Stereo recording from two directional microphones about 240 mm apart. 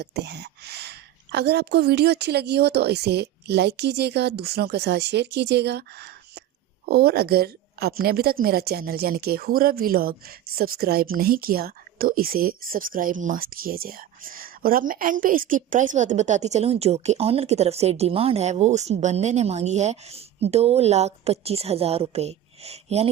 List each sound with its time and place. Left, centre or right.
0.0 s a woman's voice: right